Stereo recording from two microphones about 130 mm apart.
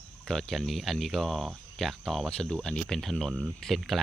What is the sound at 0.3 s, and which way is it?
Speech, 5° left (ahead or behind).